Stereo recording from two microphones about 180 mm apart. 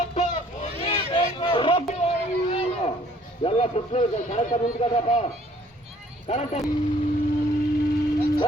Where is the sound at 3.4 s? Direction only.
35° left (ahead or behind).